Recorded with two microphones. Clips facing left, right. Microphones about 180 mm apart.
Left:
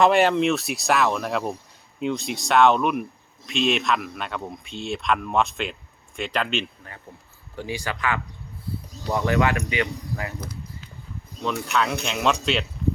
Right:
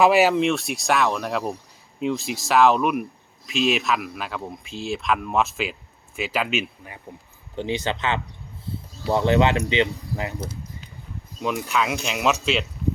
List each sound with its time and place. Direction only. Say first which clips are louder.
0.0 s speech: right 1 dB; 5° right (ahead or behind)
7.5 s speech: right 4 dB; 20° right (ahead or behind)
11.4 s speech: even; 10° right (ahead or behind)